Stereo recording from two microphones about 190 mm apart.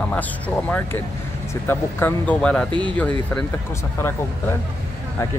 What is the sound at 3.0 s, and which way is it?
Speech, 5° left (ahead or behind).